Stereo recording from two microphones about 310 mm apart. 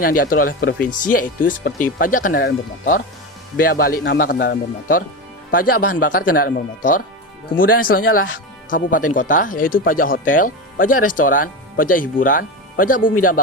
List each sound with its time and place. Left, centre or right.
0.0 s speech: left